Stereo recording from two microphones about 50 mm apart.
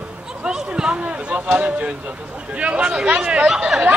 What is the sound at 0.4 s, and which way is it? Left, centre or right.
Speech, centre.